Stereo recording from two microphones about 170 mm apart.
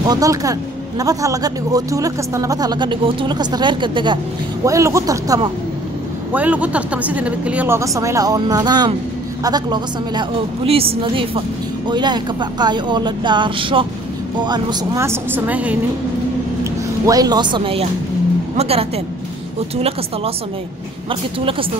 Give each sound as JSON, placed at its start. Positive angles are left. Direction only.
{"t": 0.0, "sound": "speech", "side_deg": -20}
{"t": 4.6, "sound": "speech", "side_deg": -15}
{"t": 6.3, "sound": "a woman's voice", "side_deg": -10}
{"t": 17.0, "sound": "speech", "side_deg": -20}
{"t": 21.1, "sound": "speech", "side_deg": -30}